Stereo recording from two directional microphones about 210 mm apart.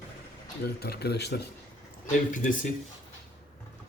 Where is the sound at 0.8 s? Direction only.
50° left (ahead or behind).